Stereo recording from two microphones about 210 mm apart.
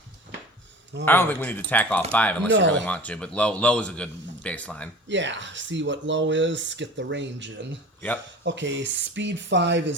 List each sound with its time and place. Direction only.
1.0 s speech: 10° left (ahead or behind)
2.5 s speech: 60° right (ahead or behind)
2.8 s a man's voice: 5° left (ahead or behind)
5.0 s speech: 60° right (ahead or behind)